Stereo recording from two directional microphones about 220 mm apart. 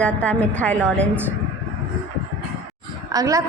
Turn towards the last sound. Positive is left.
turn(degrees=-15)  # may be behind; listen again after turning